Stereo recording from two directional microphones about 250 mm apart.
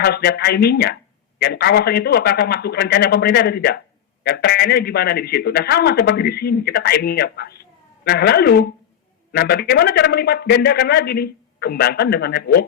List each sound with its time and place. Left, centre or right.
0.0 s a man's voice: left